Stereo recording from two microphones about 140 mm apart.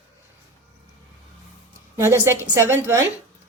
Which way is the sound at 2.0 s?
20° right (ahead or behind).